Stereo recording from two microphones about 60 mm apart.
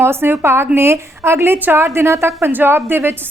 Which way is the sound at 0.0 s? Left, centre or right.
Right.